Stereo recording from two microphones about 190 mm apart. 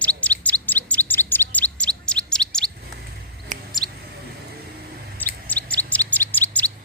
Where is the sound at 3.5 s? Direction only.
40° right (ahead or behind).